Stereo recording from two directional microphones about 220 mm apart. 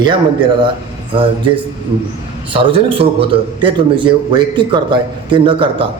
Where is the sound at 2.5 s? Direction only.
25° right (ahead or behind).